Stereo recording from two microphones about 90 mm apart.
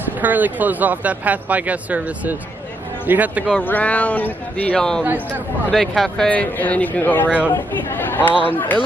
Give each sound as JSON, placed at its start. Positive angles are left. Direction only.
{"t": 0.2, "sound": "speech", "side_deg": -20}
{"t": 3.6, "sound": "speech", "side_deg": 15}
{"t": 6.2, "sound": "speech", "side_deg": 20}